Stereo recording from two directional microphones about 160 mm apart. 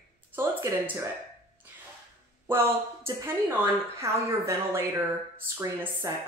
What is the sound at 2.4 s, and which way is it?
A woman's voice, 15° right (ahead or behind).